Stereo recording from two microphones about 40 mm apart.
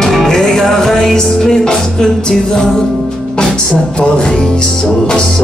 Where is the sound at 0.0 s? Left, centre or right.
Centre.